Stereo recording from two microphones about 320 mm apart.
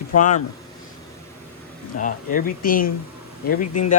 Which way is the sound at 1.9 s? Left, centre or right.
Left.